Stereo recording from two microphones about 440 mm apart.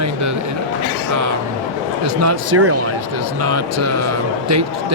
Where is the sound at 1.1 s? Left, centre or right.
Right.